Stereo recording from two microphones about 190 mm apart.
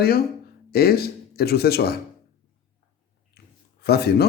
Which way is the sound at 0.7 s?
55° left (ahead or behind).